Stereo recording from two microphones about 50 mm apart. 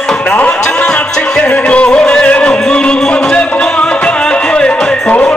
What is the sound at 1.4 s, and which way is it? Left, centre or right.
Music, left.